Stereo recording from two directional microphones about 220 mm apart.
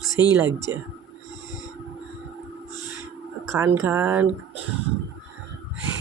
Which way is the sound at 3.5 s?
10° right (ahead or behind).